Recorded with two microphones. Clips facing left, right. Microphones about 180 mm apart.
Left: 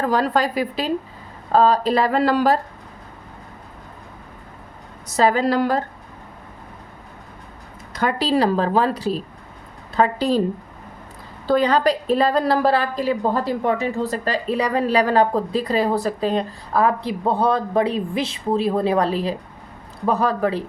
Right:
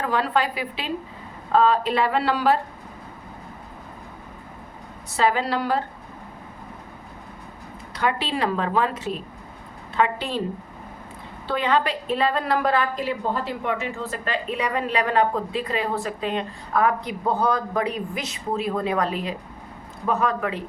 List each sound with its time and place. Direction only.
0.0 s a woman's voice: 40° left (ahead or behind)
5.0 s a woman's voice: 40° left (ahead or behind)
7.9 s a woman's voice: 40° left (ahead or behind)
11.4 s a woman's voice: 40° left (ahead or behind)